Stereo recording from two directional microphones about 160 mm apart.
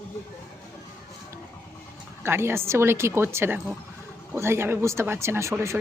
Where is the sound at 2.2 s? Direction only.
15° right (ahead or behind).